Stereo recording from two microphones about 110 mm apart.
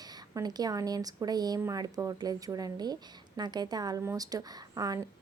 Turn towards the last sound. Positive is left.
turn(degrees=-30)  # may be behind; listen again after turning